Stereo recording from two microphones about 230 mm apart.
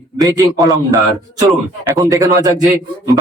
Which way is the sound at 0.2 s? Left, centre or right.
Centre.